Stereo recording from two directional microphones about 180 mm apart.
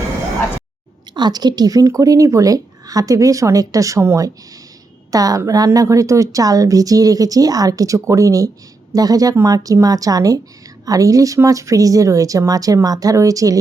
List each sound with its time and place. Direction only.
1.1 s a woman's voice: 25° right (ahead or behind)